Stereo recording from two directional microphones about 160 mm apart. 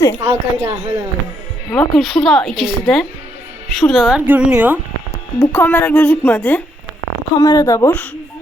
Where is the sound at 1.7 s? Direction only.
Centre (ahead or behind).